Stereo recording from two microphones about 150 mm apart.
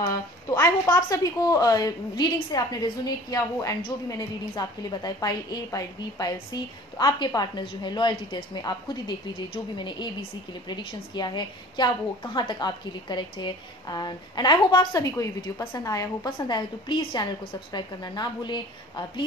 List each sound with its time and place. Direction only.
0.0 s a woman's voice: 25° left (ahead or behind)